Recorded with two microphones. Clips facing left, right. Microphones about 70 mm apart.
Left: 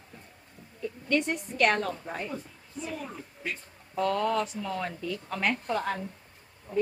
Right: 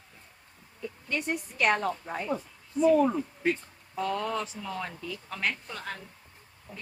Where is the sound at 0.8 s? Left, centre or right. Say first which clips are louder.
Left 4 dB; centre.